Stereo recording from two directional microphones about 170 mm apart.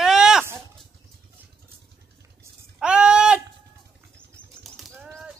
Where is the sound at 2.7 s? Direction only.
5° right (ahead or behind).